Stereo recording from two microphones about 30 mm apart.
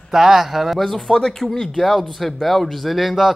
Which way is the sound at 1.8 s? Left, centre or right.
Centre.